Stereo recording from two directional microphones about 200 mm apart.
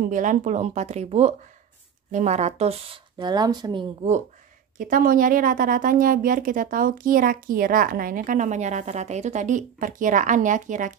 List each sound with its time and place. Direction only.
0.0 s speech: 40° right (ahead or behind); by 3.8 s 20° right (ahead or behind)
4.0 s speech: 35° right (ahead or behind)
4.7 s speech: 45° right (ahead or behind)